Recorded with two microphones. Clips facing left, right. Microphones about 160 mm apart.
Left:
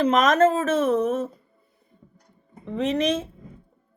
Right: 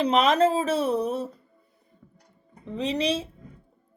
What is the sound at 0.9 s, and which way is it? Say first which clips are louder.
Speech: left 4 dB; 35° right (ahead or behind).